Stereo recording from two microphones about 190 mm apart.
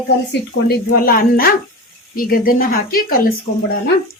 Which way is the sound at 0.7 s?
50° left (ahead or behind).